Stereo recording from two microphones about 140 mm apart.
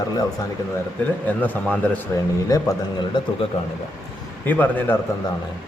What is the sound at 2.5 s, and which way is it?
Speech, 30° left (ahead or behind).